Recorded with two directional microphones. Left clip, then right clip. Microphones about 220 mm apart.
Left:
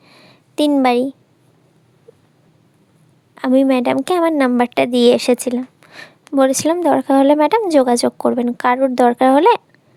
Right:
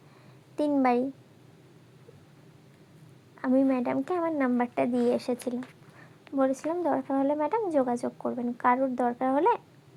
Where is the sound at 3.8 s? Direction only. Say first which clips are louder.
Left 13 dB; 50° left (ahead or behind).